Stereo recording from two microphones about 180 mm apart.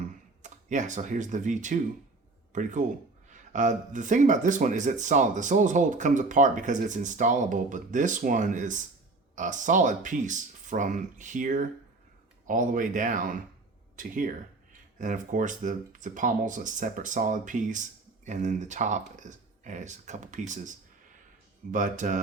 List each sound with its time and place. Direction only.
0.4 s speech: 40° right (ahead or behind)